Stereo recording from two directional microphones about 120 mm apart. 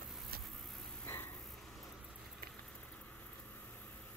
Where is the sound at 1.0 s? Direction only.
20° left (ahead or behind).